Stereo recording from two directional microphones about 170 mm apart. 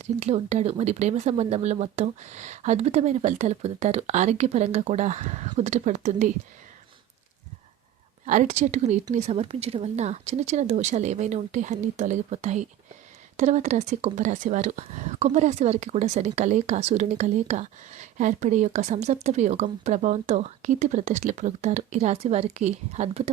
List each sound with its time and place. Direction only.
0.0 s speech: 40° right (ahead or behind)
8.3 s speech: 45° right (ahead or behind)